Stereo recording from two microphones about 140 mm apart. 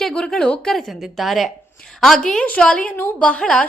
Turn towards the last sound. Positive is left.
turn(degrees=5)  # may be behind; listen again after turning